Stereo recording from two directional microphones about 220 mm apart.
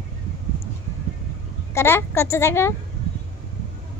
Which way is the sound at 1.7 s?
10° left (ahead or behind).